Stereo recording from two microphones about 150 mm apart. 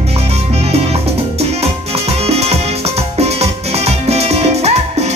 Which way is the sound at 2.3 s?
40° right (ahead or behind).